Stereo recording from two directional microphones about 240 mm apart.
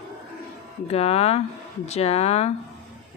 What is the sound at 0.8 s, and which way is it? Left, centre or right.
Speech, left.